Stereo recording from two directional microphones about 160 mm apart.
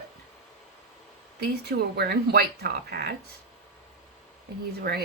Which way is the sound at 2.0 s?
90° right.